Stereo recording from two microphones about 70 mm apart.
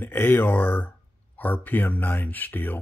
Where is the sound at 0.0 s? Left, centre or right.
Left.